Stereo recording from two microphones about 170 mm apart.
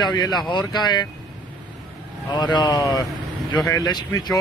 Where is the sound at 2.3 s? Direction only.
25° left (ahead or behind).